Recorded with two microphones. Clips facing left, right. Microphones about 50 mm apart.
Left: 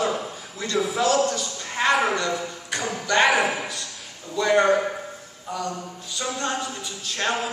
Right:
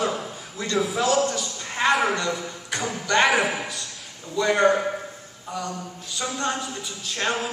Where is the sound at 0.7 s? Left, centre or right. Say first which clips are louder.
Left 1 dB; centre.